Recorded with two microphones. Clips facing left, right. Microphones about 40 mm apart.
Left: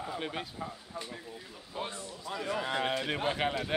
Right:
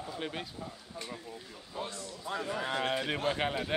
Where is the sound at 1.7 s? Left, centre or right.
Left.